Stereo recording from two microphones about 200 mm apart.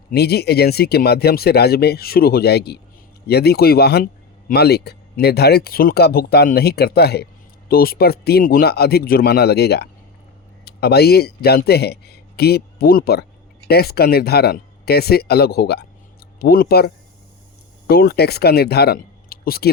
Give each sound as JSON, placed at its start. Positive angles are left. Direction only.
{"t": 0.1, "sound": "speech", "side_deg": 50}